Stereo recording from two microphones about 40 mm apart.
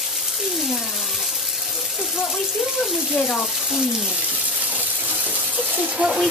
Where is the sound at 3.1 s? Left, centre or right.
Centre.